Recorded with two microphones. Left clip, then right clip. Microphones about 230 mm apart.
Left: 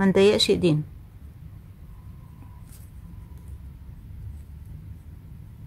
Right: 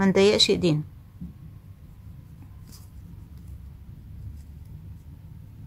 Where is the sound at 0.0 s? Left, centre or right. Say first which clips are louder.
Even; centre.